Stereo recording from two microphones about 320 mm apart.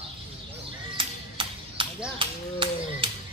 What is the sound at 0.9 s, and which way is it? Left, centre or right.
Music, centre.